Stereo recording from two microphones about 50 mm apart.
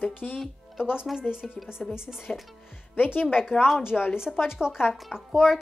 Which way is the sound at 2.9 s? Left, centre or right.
Left.